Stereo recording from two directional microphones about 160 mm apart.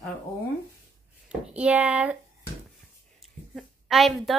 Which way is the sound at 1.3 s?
5° right (ahead or behind).